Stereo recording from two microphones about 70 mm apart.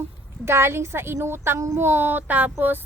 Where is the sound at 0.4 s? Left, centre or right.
Right.